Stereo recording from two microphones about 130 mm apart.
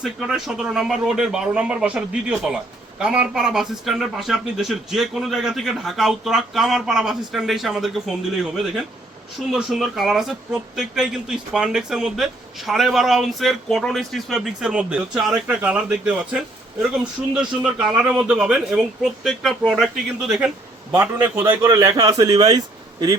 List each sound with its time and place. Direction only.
0.0 s speech: 5° right (ahead or behind)
9.5 s speech: 5° right (ahead or behind)
17.6 s speech: 5° right (ahead or behind)
20.9 s a man's voice: 15° right (ahead or behind)
21.7 s a man's voice: 25° right (ahead or behind)